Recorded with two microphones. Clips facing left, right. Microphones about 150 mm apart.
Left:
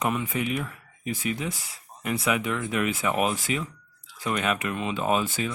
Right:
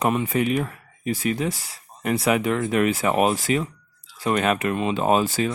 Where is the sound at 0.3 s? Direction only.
45° right (ahead or behind).